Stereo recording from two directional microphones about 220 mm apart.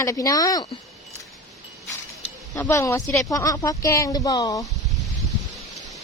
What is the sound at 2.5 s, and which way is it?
Speech, 10° left (ahead or behind).